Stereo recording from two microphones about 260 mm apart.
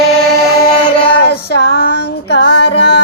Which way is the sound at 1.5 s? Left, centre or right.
Left.